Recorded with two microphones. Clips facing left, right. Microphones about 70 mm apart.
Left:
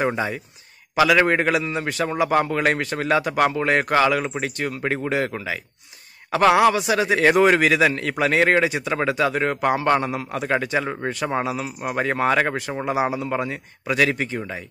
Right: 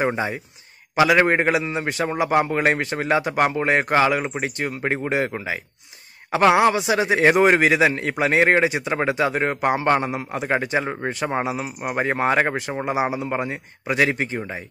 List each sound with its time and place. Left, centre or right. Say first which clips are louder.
0.0 s a man's voice: even; centre